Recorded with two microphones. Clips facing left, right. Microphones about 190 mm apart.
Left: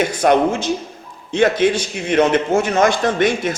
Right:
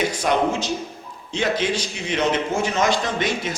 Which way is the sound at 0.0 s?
55° left (ahead or behind).